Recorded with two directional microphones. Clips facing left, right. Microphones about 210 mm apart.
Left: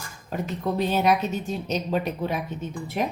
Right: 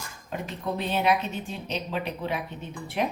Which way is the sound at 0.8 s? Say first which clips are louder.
Left 3 dB; 40° left (ahead or behind).